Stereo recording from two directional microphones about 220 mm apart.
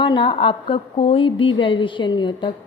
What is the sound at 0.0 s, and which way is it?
A woman's voice, 20° left (ahead or behind).